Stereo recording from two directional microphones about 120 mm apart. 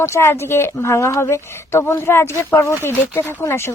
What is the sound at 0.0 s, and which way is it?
A woman's voice, 20° left (ahead or behind).